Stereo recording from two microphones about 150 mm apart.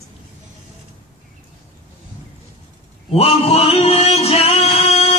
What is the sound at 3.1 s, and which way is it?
Speech, 40° left (ahead or behind).